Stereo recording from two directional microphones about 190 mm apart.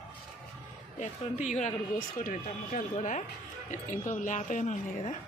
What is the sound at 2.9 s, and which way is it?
Speech, 40° left (ahead or behind).